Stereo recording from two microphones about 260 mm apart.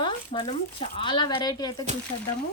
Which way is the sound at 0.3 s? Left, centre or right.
Left.